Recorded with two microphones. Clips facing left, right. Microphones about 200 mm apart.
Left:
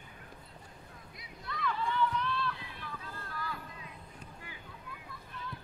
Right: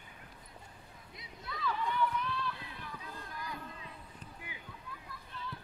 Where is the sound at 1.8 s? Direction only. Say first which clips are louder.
Left 2 dB; 15° right (ahead or behind).